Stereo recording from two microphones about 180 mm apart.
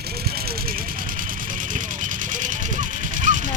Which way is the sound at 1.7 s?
45° right (ahead or behind).